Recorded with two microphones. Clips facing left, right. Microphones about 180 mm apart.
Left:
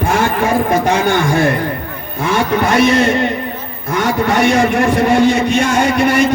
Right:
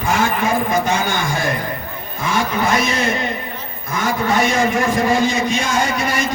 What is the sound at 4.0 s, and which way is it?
A man's voice, 70° left (ahead or behind).